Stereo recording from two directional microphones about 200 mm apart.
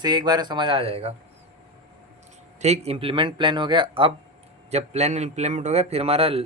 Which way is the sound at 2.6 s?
35° right (ahead or behind).